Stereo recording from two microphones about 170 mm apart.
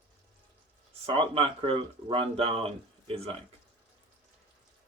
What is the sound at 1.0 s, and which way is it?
Speech, 30° right (ahead or behind).